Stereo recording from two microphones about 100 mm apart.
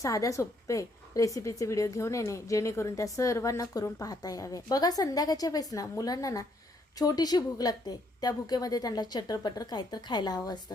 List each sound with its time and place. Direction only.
0.0 s a woman's voice: 35° left (ahead or behind)